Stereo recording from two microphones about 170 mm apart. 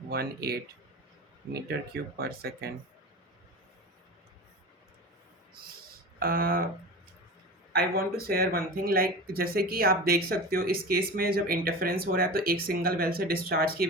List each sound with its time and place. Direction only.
0.1 s speech: 65° right (ahead or behind)
2.1 s speech: 65° right (ahead or behind)
6.1 s speech: 60° right (ahead or behind)
7.7 s speech: 60° right (ahead or behind)